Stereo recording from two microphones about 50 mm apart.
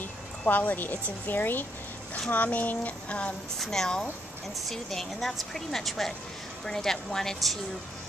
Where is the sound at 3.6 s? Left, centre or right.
Centre.